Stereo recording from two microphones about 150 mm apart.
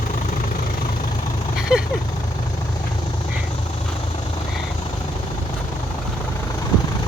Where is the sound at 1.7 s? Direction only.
5° right (ahead or behind).